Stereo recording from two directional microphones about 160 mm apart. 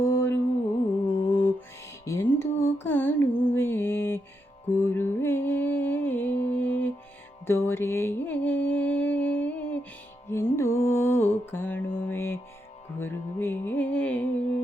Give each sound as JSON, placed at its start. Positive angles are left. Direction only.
{"t": 0.0, "sound": "music", "side_deg": 15}
{"t": 1.2, "sound": "mantra", "side_deg": 15}
{"t": 2.0, "sound": "music", "side_deg": 15}